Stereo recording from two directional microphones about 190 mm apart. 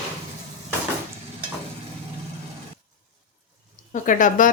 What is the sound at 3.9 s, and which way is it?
Speech, 45° left (ahead or behind).